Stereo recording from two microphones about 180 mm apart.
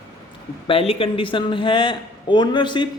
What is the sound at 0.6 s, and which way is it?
Speech, 30° left (ahead or behind).